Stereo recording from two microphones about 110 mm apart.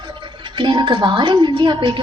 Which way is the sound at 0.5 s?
45° right (ahead or behind).